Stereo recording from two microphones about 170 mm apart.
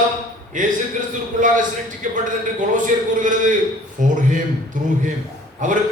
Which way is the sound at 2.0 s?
50° right (ahead or behind).